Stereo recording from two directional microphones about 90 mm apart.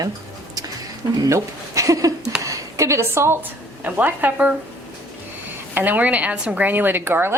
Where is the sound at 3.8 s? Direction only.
20° right (ahead or behind).